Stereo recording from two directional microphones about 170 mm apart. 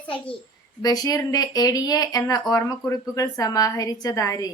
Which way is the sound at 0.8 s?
20° left (ahead or behind).